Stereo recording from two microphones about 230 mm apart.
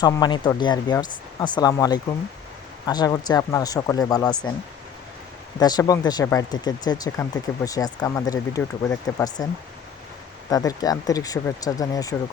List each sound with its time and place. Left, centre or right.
0.0 s speech: centre
5.5 s speech: centre
10.5 s speech: centre